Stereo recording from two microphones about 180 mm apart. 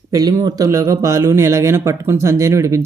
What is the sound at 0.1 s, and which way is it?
A man's voice, 20° right (ahead or behind).